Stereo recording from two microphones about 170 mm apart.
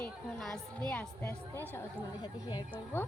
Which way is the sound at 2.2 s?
25° left (ahead or behind).